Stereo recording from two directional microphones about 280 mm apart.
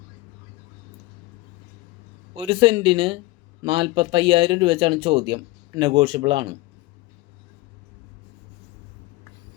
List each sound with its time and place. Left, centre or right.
2.3 s speech: centre